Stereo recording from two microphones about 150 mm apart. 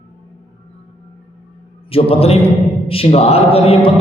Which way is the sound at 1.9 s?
40° left (ahead or behind).